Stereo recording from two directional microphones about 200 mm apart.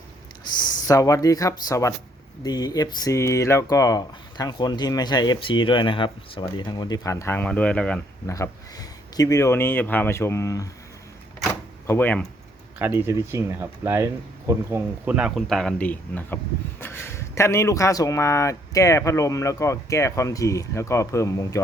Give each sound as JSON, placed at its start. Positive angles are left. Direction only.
{"t": 0.6, "sound": "speech", "side_deg": 15}
{"t": 8.3, "sound": "speech", "side_deg": 15}
{"t": 11.9, "sound": "speech", "side_deg": 10}
{"t": 12.8, "sound": "speech", "side_deg": -10}